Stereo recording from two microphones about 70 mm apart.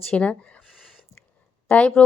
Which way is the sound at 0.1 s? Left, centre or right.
Centre.